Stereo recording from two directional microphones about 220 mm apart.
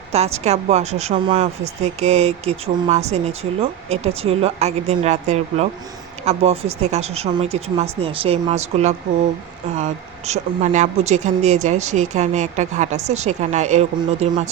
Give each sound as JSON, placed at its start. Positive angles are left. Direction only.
{"t": 0.1, "sound": "speech", "side_deg": -30}